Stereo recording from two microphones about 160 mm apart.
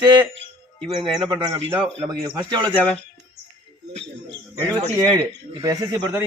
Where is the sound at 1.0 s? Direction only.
30° right (ahead or behind).